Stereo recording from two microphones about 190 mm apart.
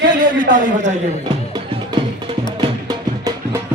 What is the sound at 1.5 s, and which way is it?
Music, 25° right (ahead or behind).